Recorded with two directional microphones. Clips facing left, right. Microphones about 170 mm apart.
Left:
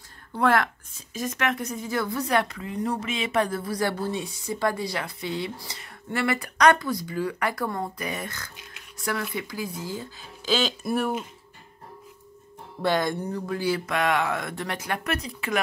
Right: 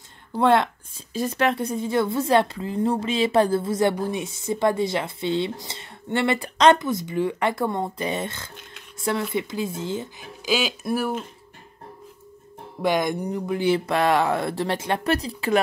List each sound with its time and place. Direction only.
0.3 s a woman's voice: 25° right (ahead or behind); by 11.2 s centre (ahead or behind)
12.8 s speech: 15° right (ahead or behind); by 15.6 s 30° right (ahead or behind)